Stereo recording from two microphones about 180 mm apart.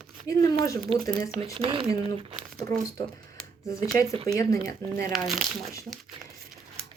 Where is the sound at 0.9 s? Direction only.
30° right (ahead or behind).